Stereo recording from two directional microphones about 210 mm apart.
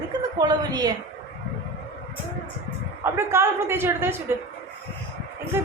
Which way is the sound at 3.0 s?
10° right (ahead or behind).